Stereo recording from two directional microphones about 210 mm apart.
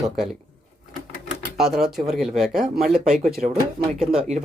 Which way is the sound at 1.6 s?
Centre (ahead or behind).